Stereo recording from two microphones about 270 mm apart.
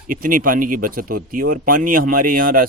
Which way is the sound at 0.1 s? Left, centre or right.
Right.